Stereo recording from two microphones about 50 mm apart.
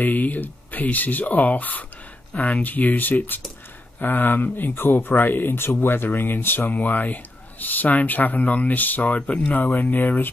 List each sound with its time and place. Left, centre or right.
0.0 s speech: left
9.2 s speech: centre
9.8 s speech: left